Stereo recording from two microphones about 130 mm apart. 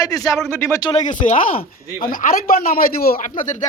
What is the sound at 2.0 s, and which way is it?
Speech, 90° left.